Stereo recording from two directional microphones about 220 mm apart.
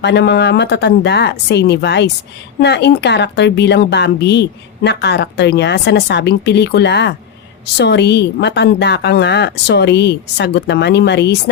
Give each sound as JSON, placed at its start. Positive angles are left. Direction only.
{"t": 0.0, "sound": "a woman's voice", "side_deg": 50}